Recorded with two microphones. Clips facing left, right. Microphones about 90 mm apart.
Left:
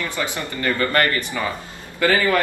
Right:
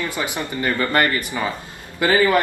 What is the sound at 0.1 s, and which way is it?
A man's voice, 15° right (ahead or behind).